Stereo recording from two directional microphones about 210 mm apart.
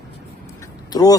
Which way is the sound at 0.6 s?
15° left (ahead or behind).